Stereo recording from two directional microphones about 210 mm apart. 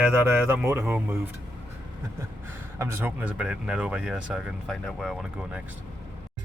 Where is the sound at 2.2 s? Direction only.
10° right (ahead or behind).